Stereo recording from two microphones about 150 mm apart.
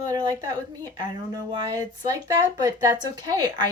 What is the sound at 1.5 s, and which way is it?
A woman's voice, 25° right (ahead or behind).